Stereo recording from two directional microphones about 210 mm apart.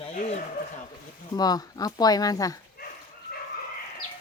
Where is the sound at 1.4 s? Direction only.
20° left (ahead or behind).